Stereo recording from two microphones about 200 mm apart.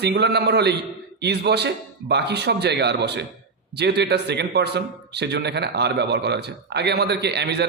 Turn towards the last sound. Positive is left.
turn(degrees=-55)  # may be behind; listen again after turning